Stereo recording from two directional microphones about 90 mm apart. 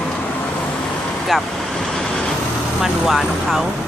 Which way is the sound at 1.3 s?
5° left (ahead or behind).